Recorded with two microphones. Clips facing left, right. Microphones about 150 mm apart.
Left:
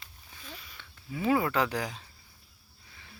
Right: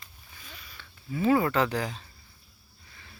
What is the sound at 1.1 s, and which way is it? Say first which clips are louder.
Speech: right 3 dB; 5° left (ahead or behind).